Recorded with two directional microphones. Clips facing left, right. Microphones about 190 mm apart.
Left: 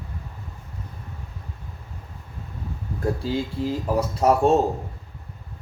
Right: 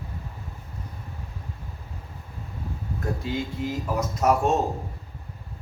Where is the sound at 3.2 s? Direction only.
30° left (ahead or behind).